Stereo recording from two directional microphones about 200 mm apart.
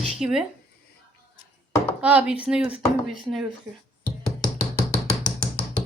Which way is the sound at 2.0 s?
5° right (ahead or behind).